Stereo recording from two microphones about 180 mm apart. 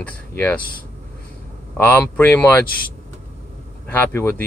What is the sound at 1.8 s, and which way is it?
Speech, 10° left (ahead or behind).